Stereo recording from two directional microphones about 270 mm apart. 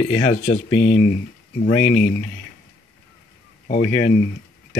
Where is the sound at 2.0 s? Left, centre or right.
Left.